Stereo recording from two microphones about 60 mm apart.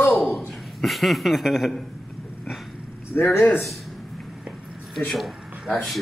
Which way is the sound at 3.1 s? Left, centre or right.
Left.